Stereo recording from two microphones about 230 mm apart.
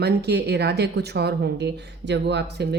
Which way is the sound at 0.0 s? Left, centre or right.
Right.